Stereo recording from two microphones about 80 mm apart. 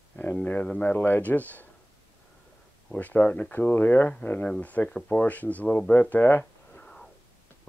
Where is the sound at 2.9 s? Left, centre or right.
Centre.